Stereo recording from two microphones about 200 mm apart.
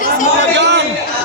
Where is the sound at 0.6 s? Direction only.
60° right (ahead or behind).